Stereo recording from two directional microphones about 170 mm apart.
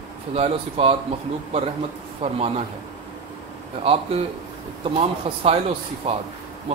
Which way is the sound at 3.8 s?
35° right (ahead or behind).